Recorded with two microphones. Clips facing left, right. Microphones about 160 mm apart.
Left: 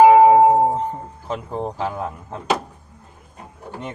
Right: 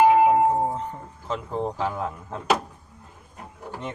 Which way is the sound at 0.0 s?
90° left.